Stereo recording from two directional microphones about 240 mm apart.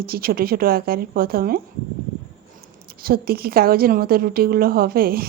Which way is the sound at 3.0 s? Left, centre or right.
Right.